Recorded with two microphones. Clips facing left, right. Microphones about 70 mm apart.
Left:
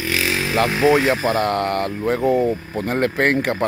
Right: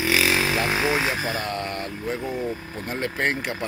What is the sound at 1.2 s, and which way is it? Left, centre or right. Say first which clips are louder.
Speech: left 9 dB; left.